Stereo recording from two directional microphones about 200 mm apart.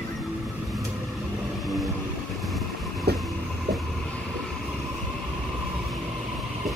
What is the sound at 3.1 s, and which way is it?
Train, 55° right (ahead or behind).